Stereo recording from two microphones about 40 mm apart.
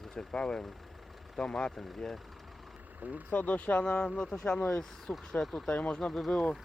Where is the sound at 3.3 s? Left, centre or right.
Left.